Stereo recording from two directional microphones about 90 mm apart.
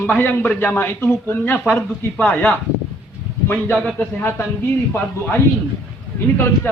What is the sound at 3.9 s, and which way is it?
Speech, 25° left (ahead or behind).